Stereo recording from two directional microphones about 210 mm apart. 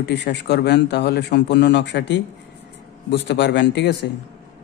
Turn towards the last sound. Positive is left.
turn(degrees=55)  # may be behind; listen again after turning